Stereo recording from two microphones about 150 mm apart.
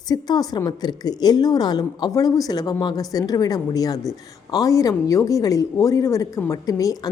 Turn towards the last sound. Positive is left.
turn(degrees=25)  # may be behind; listen again after turning